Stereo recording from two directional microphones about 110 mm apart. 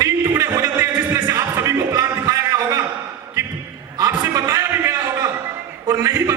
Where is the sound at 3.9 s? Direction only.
35° right (ahead or behind).